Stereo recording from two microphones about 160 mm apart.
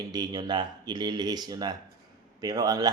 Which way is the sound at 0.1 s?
25° right (ahead or behind).